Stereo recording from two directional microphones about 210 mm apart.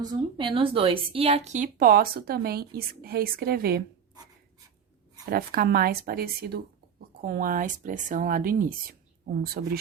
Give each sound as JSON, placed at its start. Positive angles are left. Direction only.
{"t": 0.0, "sound": "speech", "side_deg": -20}
{"t": 5.3, "sound": "speech", "side_deg": -45}